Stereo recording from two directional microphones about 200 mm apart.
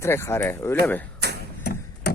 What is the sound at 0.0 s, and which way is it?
Speech, 10° left (ahead or behind).